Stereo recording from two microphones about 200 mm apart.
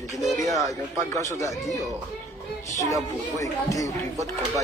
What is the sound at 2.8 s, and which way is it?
Speech, 15° left (ahead or behind).